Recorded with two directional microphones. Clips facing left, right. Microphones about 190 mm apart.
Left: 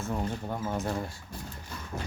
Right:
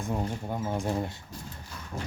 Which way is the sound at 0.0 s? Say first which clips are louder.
Right 1 dB; 15° right (ahead or behind).